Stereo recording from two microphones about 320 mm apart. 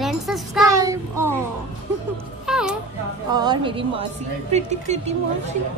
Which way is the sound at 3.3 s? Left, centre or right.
Centre.